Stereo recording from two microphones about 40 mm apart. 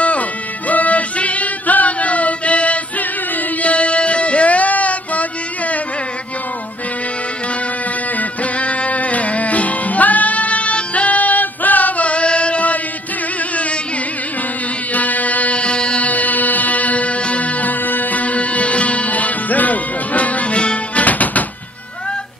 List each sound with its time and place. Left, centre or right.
0.7 s music: left
8.2 s music: left
15.0 s music: left
16.0 s music: left
21.0 s music: left